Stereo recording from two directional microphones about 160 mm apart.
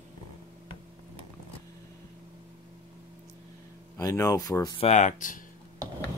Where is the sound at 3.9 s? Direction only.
20° left (ahead or behind).